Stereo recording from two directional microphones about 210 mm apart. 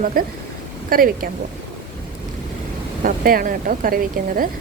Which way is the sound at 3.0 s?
40° right (ahead or behind).